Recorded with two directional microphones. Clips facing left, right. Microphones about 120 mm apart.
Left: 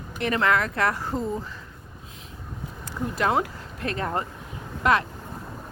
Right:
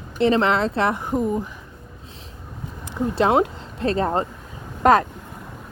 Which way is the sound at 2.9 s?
20° right (ahead or behind).